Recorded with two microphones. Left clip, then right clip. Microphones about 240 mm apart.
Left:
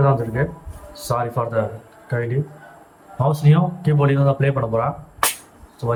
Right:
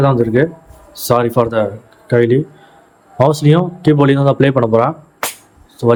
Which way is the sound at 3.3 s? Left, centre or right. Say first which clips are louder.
Right 8 dB; right.